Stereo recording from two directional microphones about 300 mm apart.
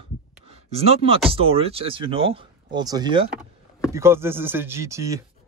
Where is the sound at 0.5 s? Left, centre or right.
Centre.